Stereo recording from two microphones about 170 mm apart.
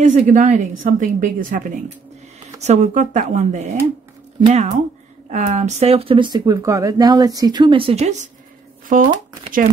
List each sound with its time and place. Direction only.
0.0 s a woman's voice: 45° right (ahead or behind)
2.6 s a woman's voice: 45° right (ahead or behind)